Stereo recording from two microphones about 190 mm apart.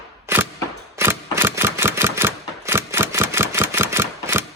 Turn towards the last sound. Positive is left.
turn(degrees=-15)  # may be behind; listen again after turning